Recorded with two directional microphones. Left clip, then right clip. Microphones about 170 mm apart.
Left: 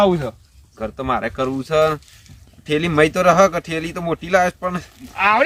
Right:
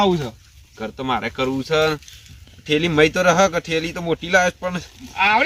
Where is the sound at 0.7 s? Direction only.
15° left (ahead or behind).